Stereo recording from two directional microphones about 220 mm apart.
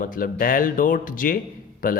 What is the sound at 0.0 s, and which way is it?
Speech, 40° left (ahead or behind).